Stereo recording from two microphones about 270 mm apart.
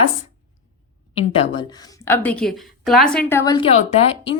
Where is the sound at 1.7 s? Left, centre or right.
Centre.